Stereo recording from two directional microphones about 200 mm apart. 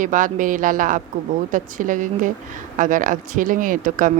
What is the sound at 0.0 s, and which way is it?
A woman's voice, 40° right (ahead or behind).